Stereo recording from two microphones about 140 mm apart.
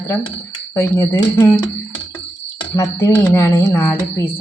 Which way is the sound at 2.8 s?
20° left (ahead or behind).